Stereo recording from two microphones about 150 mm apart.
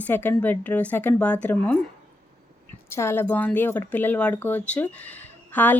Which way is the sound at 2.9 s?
15° left (ahead or behind).